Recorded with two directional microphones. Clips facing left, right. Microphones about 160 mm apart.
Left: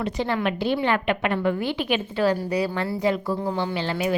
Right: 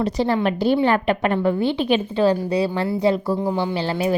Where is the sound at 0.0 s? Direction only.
35° right (ahead or behind).